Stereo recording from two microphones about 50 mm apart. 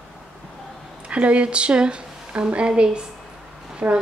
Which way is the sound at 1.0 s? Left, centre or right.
Right.